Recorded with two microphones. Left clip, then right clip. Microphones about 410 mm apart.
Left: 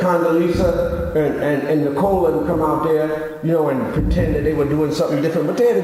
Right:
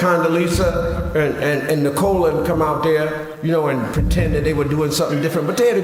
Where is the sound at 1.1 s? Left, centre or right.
Right.